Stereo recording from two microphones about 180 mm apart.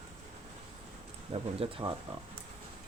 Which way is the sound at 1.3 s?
30° right (ahead or behind).